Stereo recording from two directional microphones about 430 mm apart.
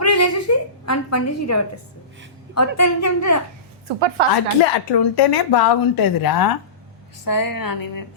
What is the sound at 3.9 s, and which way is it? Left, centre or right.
Speech, right.